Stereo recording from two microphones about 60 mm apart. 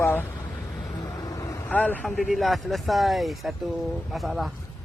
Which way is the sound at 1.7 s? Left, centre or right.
Left.